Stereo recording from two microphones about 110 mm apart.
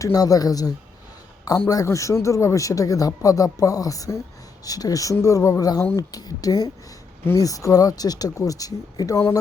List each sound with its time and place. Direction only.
0.0 s speech: 30° left (ahead or behind)